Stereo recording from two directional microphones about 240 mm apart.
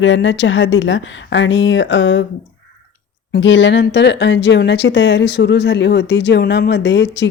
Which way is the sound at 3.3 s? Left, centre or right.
Left.